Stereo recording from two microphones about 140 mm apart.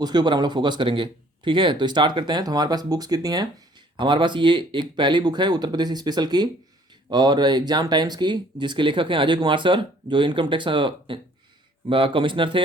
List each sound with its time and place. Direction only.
0.0 s speech: 30° right (ahead or behind)